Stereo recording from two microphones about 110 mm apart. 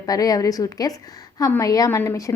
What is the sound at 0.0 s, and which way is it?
A woman's voice, 35° left (ahead or behind).